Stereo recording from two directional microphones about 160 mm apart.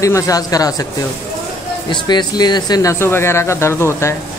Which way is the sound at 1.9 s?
25° left (ahead or behind).